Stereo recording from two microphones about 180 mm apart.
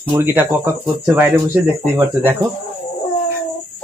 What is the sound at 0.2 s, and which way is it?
Speech, 10° right (ahead or behind).